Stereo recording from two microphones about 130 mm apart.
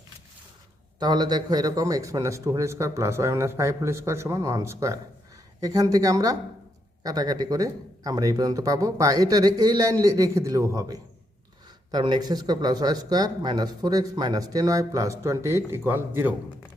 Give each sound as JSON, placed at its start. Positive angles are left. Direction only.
{"t": 0.9, "sound": "a man's voice", "side_deg": -30}